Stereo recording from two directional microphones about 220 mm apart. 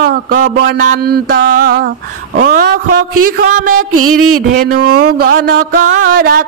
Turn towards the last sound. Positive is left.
turn(degrees=-40)  # may be behind; listen again after turning